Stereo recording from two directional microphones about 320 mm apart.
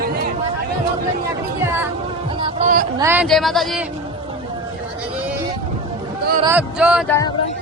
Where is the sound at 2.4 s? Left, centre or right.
Right.